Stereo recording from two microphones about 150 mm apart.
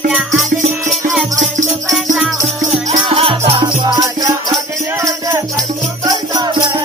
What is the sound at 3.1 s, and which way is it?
Music, 35° right (ahead or behind).